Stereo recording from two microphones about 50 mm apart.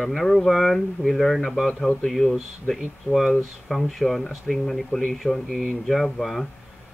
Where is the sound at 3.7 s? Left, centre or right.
Centre.